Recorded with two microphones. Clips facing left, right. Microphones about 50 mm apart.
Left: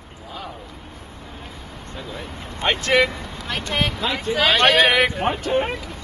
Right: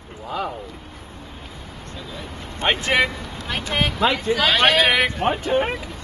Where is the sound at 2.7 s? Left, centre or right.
Centre.